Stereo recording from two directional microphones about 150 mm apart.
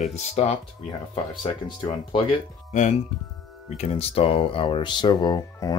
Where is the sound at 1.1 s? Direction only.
35° left (ahead or behind).